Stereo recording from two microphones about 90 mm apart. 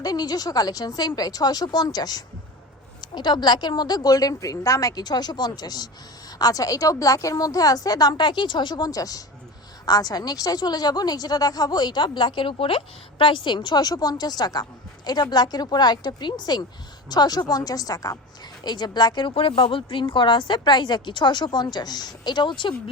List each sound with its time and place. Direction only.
0.0 s a woman's voice: 45° left (ahead or behind)
18.6 s speech: 55° left (ahead or behind)